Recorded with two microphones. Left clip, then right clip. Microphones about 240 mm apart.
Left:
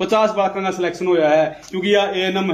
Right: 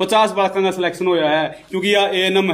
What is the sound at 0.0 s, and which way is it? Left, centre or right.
A man's voice, right.